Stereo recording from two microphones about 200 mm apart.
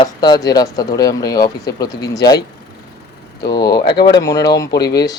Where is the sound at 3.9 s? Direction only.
55° left (ahead or behind).